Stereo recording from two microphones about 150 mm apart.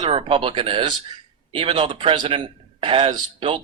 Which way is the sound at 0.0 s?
40° right (ahead or behind).